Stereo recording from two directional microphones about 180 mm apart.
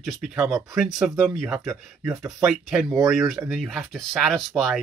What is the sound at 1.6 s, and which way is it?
Speech, 15° right (ahead or behind).